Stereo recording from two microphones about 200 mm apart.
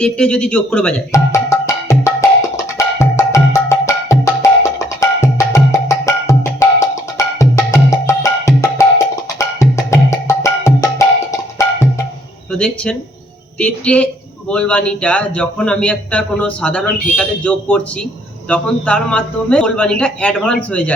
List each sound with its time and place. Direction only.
0.0 s a man's voice: 5° left (ahead or behind)
1.1 s music: 15° left (ahead or behind)
12.5 s a man's voice: 5° left (ahead or behind)